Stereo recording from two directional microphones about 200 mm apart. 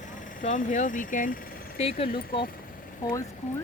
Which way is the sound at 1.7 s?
30° left (ahead or behind).